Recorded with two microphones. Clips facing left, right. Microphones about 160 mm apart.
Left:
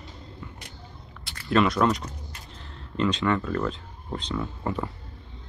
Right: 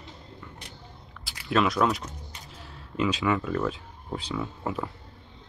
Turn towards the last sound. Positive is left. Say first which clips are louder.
# left 2 dB
turn(degrees=-5)  # may be behind; listen again after turning